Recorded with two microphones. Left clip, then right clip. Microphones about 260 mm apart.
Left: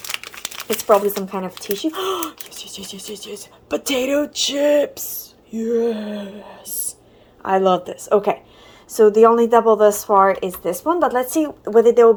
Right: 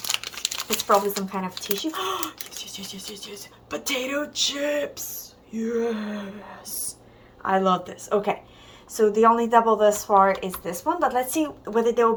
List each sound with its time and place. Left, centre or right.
0.0 s speech: centre